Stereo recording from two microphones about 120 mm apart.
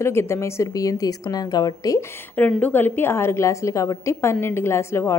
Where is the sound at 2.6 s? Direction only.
15° left (ahead or behind).